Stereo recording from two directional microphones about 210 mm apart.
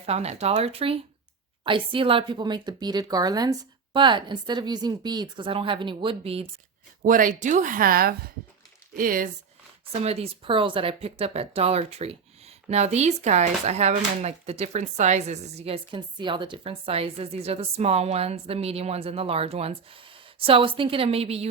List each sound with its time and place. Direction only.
0.0 s speech: 30° right (ahead or behind)
7.0 s speech: 40° right (ahead or behind)
10.0 s speech: 30° right (ahead or behind)